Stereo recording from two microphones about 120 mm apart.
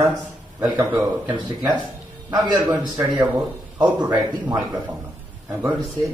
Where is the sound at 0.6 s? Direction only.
30° right (ahead or behind).